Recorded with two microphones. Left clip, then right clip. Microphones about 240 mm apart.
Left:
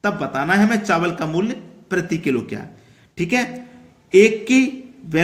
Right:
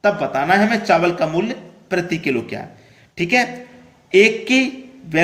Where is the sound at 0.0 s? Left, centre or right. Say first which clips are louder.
Right 4 dB; left.